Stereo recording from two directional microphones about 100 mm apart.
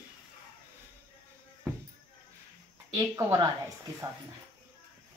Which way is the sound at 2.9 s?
35° right (ahead or behind).